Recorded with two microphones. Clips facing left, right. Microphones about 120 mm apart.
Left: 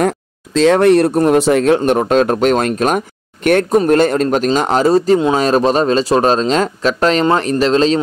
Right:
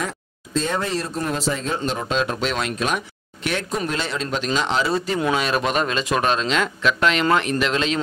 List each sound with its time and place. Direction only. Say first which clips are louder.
0.6 s speech: left 14 dB; 75° left (ahead or behind); by 8.0 s 35° left (ahead or behind)